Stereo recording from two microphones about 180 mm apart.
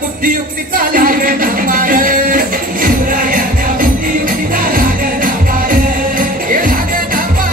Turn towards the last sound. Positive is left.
turn(degrees=-50)  # may be behind; listen again after turning